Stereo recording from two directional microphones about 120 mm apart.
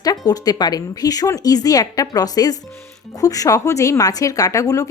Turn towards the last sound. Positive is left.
turn(degrees=25)  # may be behind; listen again after turning